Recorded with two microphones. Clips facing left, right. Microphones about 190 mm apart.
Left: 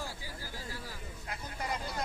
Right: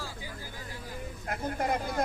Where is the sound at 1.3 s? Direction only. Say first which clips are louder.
Right 8 dB; 50° right (ahead or behind).